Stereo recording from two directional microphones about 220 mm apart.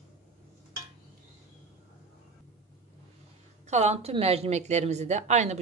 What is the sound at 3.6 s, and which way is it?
A woman's voice, 30° right (ahead or behind).